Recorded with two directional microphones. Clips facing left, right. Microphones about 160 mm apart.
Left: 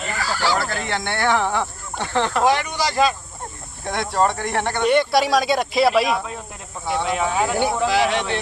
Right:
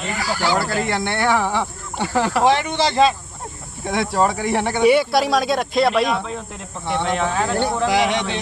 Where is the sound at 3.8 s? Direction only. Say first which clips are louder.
Right 1 dB; centre (ahead or behind).